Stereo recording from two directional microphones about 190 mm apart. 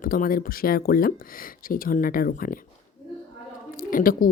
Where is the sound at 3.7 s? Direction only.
45° left (ahead or behind).